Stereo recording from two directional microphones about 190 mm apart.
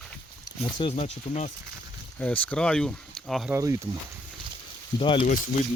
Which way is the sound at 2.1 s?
10° left (ahead or behind).